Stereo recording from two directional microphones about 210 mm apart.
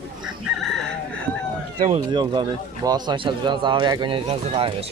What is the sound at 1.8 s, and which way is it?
Speech, 25° right (ahead or behind).